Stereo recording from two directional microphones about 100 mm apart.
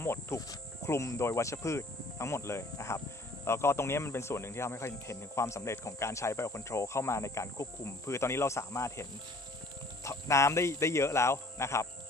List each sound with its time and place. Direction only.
0.0 s speech: 25° left (ahead or behind)
10.0 s speech: 30° left (ahead or behind)